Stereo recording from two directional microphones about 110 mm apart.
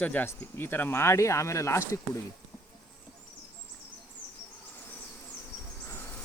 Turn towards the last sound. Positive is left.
turn(degrees=20)  # may be behind; listen again after turning